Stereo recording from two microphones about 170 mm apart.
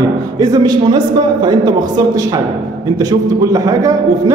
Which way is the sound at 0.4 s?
25° right (ahead or behind).